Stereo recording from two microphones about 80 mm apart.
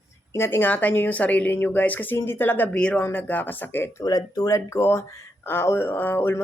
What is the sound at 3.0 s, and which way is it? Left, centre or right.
Speech, left.